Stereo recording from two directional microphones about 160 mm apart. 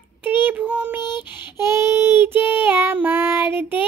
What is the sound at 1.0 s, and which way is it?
Child singing, 30° left (ahead or behind).